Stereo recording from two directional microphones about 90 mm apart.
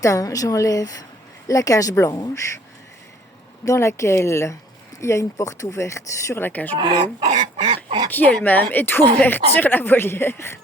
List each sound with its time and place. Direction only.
0.0 s speech: 35° left (ahead or behind)
3.7 s speech: 35° left (ahead or behind)
6.4 s a woman's voice: 20° left (ahead or behind)
6.7 s speech: 65° right (ahead or behind)
7.5 s a sound: 90° right
8.1 s a woman's voice: 20° left (ahead or behind)